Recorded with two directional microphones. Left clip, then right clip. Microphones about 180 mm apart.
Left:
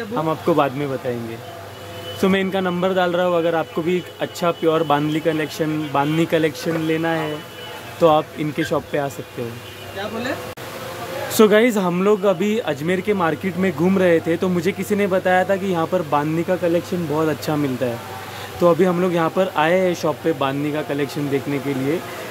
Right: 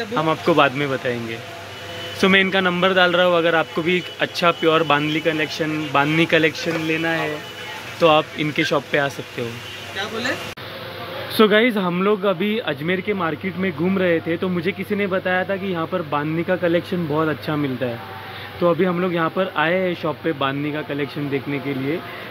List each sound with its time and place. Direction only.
0.1 s speech: 5° left (ahead or behind)
2.1 s a man's voice: 10° left (ahead or behind)
6.6 s speech: 25° left (ahead or behind)
8.0 s a man's voice: 15° left (ahead or behind)
11.3 s a man's voice: 15° left (ahead or behind)
16.4 s speech: centre (ahead or behind)
17.3 s a man's voice: 10° left (ahead or behind)